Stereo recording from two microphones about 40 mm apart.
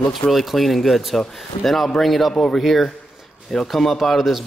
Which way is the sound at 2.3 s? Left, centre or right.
Centre.